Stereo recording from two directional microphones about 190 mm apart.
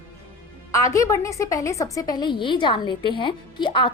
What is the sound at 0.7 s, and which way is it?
A woman's voice, 15° left (ahead or behind).